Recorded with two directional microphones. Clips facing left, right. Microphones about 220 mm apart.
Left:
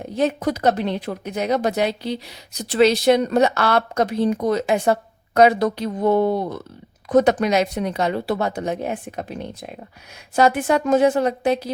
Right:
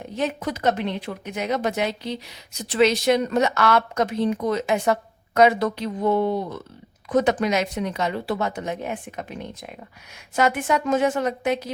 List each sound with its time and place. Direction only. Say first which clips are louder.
0.2 s speech: left 5 dB; 40° left (ahead or behind)